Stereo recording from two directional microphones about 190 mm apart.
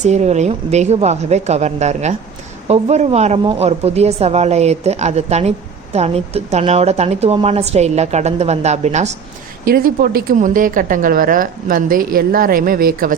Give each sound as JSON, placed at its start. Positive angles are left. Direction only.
{"t": 0.0, "sound": "a woman's voice", "side_deg": -35}
{"t": 9.6, "sound": "a woman's voice", "side_deg": -50}